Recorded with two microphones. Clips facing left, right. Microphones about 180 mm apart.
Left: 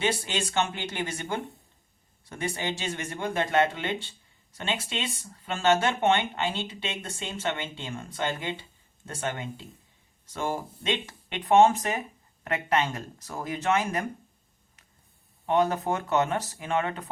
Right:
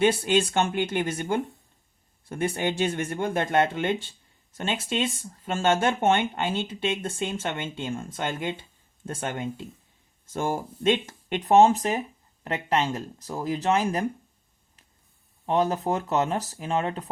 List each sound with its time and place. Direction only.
0.0 s speech: 55° right (ahead or behind); by 14.0 s 30° right (ahead or behind)
15.4 s speech: 30° right (ahead or behind)